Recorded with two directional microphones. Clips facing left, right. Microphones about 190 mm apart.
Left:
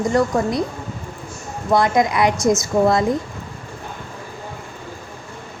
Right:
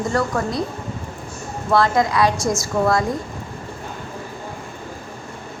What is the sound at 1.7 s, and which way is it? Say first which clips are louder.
A woman's voice: left 1 dB; 20° left (ahead or behind).